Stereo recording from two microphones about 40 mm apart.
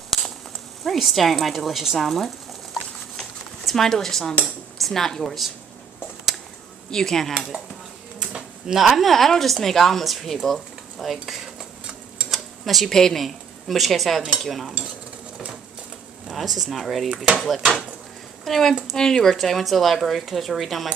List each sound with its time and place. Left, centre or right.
0.1 s a sound: centre
0.8 s speech: centre
3.6 s speech: centre
6.9 s speech: centre
8.2 s a sound: right
8.7 s speech: centre
12.3 s a sound: centre
12.9 s speech: centre
16.3 s speech: centre
18.4 s speech: centre
19.3 s speech: centre